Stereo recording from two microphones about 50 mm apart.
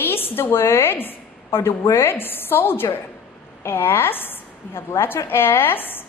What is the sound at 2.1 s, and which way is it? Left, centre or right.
A woman's voice, left.